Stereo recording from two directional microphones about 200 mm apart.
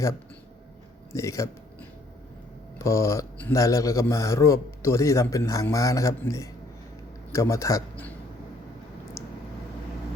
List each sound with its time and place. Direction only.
1.1 s speech: 15° left (ahead or behind)
2.7 s speech: 15° left (ahead or behind)